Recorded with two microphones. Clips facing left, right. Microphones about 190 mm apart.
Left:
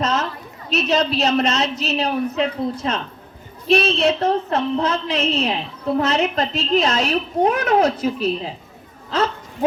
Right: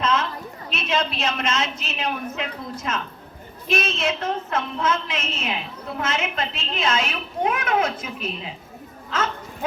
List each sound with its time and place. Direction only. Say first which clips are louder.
0.0 s a sound: left 1 dB; 40° left (ahead or behind)
0.7 s a woman's voice: left 6 dB; 40° left (ahead or behind)
9.0 s hiccup: left 5 dB; 35° left (ahead or behind)